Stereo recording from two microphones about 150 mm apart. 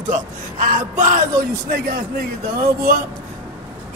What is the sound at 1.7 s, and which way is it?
Speech, 90° right.